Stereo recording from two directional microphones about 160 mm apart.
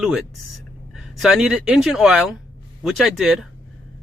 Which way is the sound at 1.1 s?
Centre (ahead or behind).